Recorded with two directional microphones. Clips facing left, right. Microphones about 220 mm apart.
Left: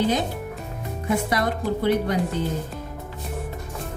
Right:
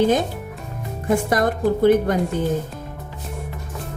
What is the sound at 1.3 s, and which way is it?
Speech, 50° right (ahead or behind).